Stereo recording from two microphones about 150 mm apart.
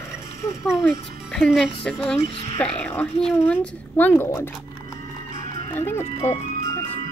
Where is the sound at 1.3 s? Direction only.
Centre (ahead or behind).